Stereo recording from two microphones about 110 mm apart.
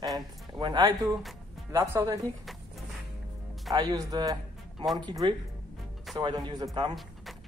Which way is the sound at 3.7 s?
35° right (ahead or behind).